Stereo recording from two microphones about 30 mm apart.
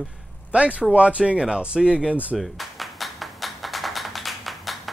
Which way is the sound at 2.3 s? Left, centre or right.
Centre.